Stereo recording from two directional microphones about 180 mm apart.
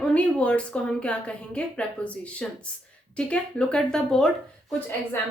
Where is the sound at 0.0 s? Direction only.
5° left (ahead or behind).